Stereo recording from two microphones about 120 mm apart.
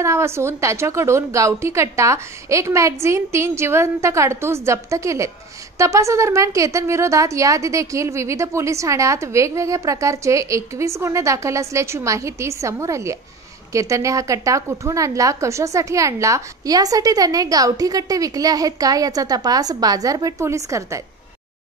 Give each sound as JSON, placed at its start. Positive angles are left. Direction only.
{"t": 0.0, "sound": "a woman's voice", "side_deg": -25}